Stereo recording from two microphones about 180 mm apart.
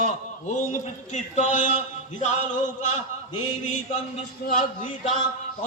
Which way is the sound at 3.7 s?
40° left (ahead or behind).